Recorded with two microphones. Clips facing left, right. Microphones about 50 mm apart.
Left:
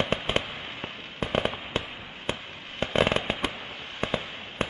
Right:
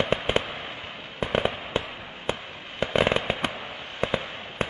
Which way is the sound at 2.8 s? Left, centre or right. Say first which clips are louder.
Right 1 dB; right.